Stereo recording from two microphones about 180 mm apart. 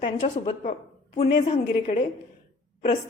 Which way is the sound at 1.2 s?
40° left (ahead or behind).